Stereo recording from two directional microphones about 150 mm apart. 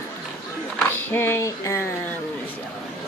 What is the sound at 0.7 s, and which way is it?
Speech, 15° left (ahead or behind).